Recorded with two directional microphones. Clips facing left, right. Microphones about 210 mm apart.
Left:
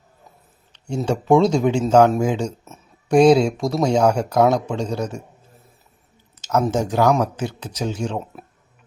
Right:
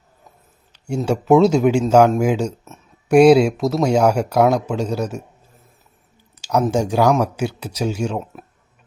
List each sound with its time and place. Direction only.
1.0 s speech: 5° right (ahead or behind)
6.3 s a sound: 10° right (ahead or behind)
6.7 s speech: 10° right (ahead or behind)